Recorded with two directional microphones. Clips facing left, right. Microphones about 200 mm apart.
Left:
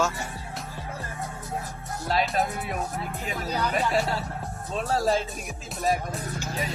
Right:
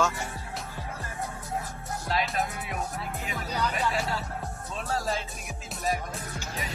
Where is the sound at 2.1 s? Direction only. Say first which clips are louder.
Left 4 dB; 35° left (ahead or behind).